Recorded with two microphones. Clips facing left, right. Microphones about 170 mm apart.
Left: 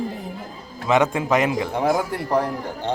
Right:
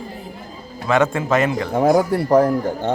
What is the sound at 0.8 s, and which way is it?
Speech, 15° left (ahead or behind).